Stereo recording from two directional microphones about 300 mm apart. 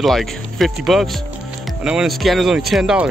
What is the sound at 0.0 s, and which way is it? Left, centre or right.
Speech, centre.